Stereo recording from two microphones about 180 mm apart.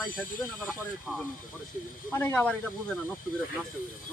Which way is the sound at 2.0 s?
10° left (ahead or behind).